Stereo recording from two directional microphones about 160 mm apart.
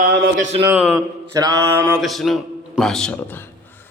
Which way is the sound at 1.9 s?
Centre (ahead or behind).